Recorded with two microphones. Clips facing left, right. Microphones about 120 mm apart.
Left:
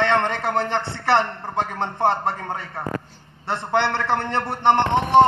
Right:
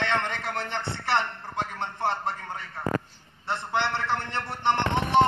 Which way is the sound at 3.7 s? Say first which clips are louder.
Left 7 dB; 70° left (ahead or behind).